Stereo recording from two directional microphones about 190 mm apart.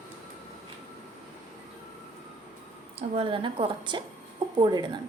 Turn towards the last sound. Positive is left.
turn(degrees=-20)  # may be behind; listen again after turning